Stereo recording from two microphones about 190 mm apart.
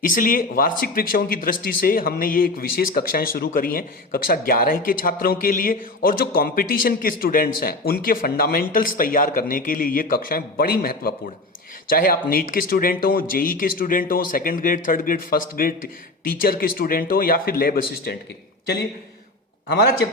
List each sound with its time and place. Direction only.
0.0 s speech: 45° left (ahead or behind)